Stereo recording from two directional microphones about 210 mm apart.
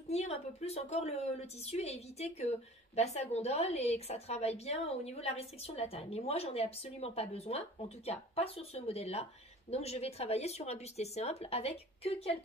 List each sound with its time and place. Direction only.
0.1 s a woman's voice: 30° left (ahead or behind)